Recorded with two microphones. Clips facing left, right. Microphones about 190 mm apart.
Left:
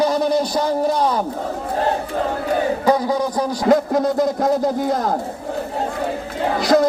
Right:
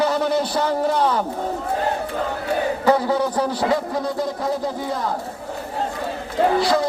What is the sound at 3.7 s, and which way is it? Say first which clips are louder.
A man's voice: left 6 dB; 45° left (ahead or behind).